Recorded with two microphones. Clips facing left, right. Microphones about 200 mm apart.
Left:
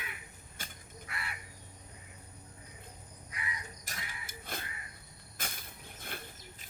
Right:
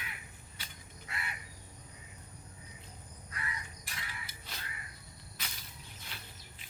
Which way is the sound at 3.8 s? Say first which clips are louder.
Left 1 dB; 50° left (ahead or behind).